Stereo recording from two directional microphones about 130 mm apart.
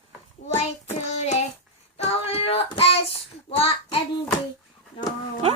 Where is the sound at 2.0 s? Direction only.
50° left (ahead or behind).